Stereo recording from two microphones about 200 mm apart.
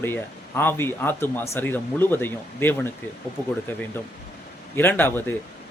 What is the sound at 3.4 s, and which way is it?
Speech, 20° right (ahead or behind).